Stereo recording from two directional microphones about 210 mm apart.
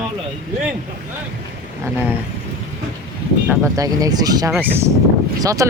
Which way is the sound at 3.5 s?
15° right (ahead or behind).